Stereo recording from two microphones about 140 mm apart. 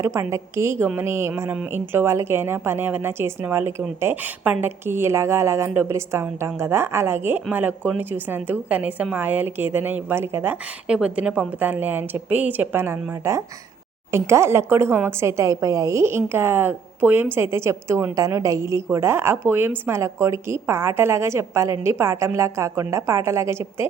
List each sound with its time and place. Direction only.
0.0 s a woman's voice: 20° right (ahead or behind)